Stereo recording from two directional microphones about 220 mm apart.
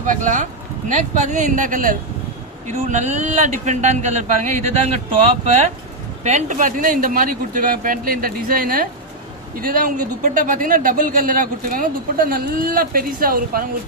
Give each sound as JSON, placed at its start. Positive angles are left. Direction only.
{"t": 0.0, "sound": "a man's voice", "side_deg": -35}